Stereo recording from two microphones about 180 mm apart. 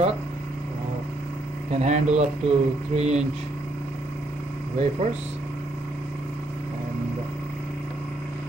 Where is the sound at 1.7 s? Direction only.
40° right (ahead or behind).